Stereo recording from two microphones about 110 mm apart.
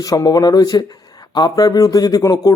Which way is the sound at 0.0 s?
35° left (ahead or behind).